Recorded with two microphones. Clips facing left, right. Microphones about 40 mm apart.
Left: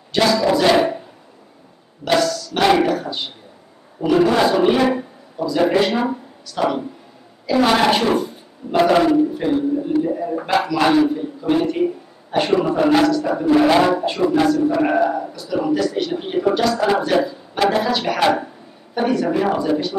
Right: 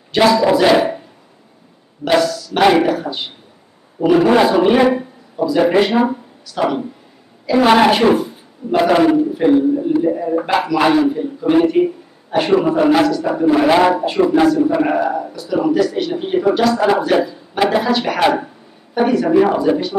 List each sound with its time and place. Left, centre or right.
0.1 s speech: centre
2.0 s a sound: centre
4.0 s speech: centre
7.5 s a man's voice: centre